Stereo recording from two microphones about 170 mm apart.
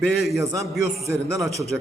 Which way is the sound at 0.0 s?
Centre (ahead or behind).